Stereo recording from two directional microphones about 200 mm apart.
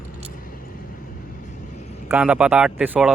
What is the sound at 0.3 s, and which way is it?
Vehicle, 45° left (ahead or behind).